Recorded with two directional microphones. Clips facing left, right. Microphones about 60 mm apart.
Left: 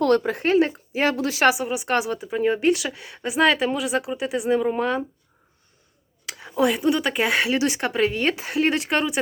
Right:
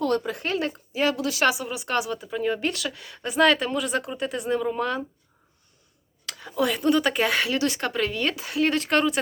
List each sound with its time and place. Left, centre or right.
0.2 s a woman's voice: left
6.2 s speech: left; by 7.3 s centre
7.3 s a woman's voice: left